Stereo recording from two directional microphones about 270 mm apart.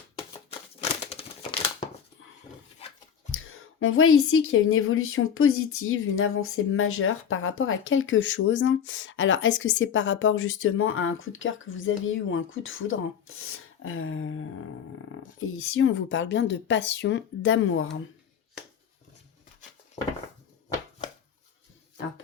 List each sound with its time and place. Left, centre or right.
1.1 s crumpling: left
3.3 s a woman's voice: left